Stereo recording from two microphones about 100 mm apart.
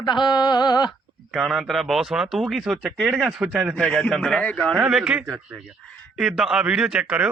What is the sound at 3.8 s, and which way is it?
Speech, 10° left (ahead or behind).